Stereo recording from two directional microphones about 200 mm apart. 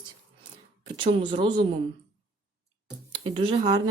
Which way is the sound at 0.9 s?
25° right (ahead or behind).